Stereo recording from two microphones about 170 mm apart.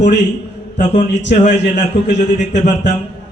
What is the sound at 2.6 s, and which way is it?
Speech, 45° left (ahead or behind).